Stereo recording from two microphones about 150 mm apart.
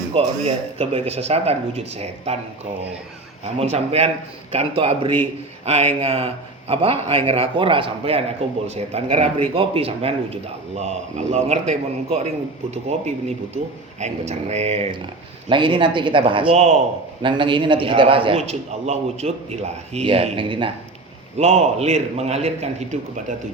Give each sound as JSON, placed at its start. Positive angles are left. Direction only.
{"t": 0.1, "sound": "speech", "side_deg": -40}
{"t": 3.6, "sound": "a man's voice", "side_deg": -45}
{"t": 21.3, "sound": "speech", "side_deg": -45}